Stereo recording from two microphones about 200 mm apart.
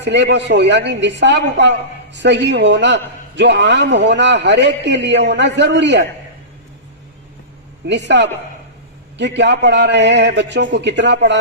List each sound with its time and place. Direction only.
0.0 s a man's voice: 60° right (ahead or behind)
7.9 s a man's voice: 60° right (ahead or behind)